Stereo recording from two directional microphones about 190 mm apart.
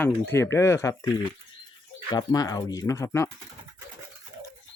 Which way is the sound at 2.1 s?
20° left (ahead or behind).